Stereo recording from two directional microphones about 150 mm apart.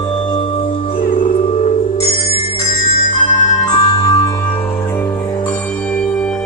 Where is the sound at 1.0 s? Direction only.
65° left (ahead or behind).